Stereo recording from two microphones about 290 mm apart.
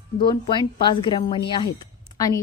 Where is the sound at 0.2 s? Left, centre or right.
Centre.